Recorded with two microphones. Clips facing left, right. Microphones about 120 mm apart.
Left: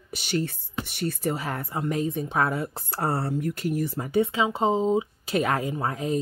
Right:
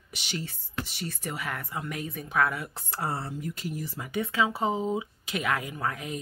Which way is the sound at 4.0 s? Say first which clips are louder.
Left 8 dB; 35° left (ahead or behind).